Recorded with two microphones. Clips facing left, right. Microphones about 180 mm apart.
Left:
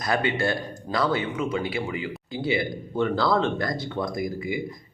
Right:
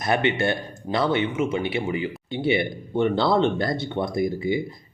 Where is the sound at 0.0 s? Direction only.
25° right (ahead or behind).